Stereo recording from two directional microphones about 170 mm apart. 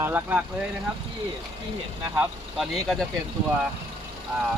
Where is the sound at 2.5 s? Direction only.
Centre (ahead or behind).